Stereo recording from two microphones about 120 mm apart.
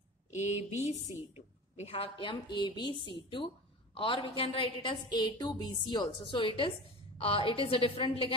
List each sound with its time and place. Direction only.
0.3 s a woman's voice: 70° left (ahead or behind); by 8.3 s 50° left (ahead or behind)